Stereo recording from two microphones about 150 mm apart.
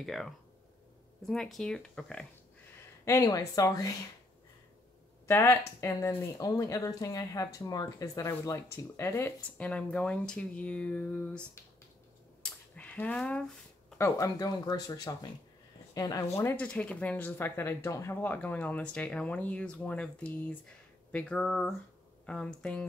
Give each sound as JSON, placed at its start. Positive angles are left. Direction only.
{"t": 0.0, "sound": "speech", "side_deg": 0}
{"t": 3.1, "sound": "speech", "side_deg": 20}
{"t": 5.2, "sound": "speech", "side_deg": 15}
{"t": 12.7, "sound": "a sound", "side_deg": 10}
{"t": 13.9, "sound": "speech", "side_deg": 20}
{"t": 16.3, "sound": "speech", "side_deg": 10}